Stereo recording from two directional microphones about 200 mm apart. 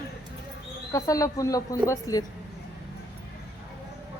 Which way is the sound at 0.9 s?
15° left (ahead or behind).